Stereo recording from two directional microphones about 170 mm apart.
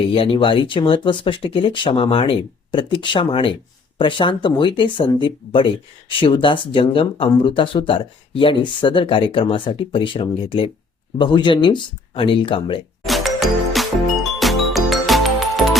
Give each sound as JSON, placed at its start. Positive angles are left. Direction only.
{"t": 0.1, "sound": "speech", "side_deg": 30}
{"t": 13.1, "sound": "music", "side_deg": 0}